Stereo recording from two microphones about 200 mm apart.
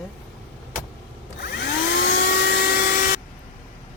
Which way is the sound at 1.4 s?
50° left (ahead or behind).